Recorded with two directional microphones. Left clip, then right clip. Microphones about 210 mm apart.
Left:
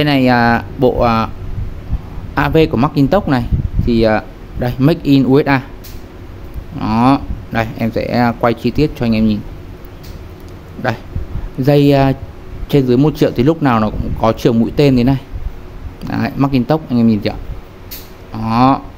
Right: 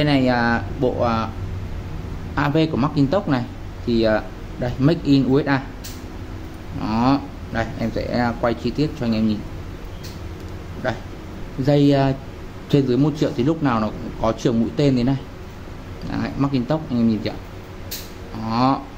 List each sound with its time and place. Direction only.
0.0 s a man's voice: 40° left (ahead or behind)
2.3 s a man's voice: 40° left (ahead or behind)
6.8 s a man's voice: 30° left (ahead or behind)
11.6 s a man's voice: 35° left (ahead or behind)
18.3 s a man's voice: 35° left (ahead or behind)